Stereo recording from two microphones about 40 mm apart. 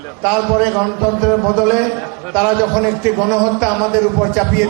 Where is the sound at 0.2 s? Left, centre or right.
Centre.